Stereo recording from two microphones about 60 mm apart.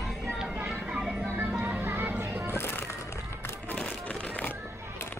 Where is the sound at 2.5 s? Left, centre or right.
Left.